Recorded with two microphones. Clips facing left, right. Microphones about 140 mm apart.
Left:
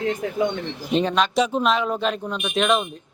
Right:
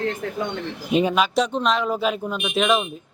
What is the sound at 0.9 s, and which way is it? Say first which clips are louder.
Speech: right 1 dB; 10° right (ahead or behind).